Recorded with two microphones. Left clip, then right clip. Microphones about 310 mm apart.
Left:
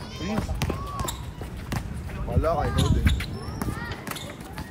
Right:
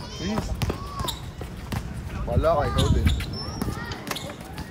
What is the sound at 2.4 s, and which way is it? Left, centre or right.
Speech, right.